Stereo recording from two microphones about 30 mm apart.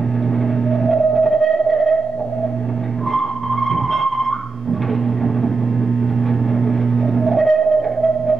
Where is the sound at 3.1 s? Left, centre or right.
Centre.